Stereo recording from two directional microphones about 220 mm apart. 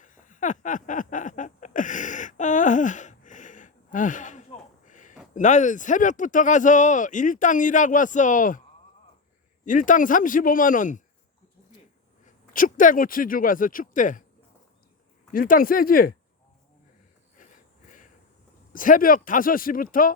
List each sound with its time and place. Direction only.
0.0 s a sound: 35° left (ahead or behind)
5.3 s speech: 35° left (ahead or behind)
9.6 s speech: 35° left (ahead or behind)
12.2 s a man's voice: 35° left (ahead or behind)
15.3 s speech: 40° left (ahead or behind)
17.3 s snort: 35° left (ahead or behind)
18.7 s speech: 40° left (ahead or behind)